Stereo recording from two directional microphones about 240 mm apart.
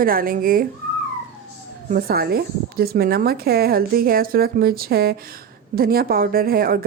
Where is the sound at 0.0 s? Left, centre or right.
Right.